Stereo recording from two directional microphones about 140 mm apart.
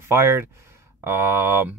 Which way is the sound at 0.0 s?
20° right (ahead or behind).